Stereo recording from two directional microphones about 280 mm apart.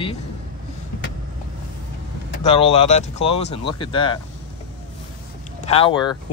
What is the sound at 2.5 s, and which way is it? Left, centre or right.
Speech, left.